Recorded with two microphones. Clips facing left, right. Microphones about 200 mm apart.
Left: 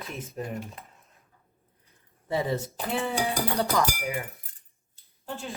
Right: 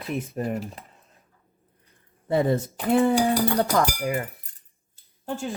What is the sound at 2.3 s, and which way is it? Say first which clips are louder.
Cutlery: right 6 dB; 55° right (ahead or behind).